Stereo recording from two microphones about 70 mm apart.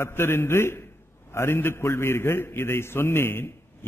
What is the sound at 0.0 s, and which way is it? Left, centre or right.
A man's voice, left.